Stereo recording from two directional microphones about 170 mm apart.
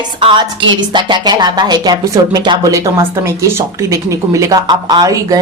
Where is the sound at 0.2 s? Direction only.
30° right (ahead or behind).